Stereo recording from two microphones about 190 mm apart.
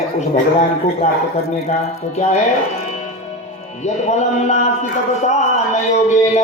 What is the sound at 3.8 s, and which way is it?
Speech, 35° left (ahead or behind).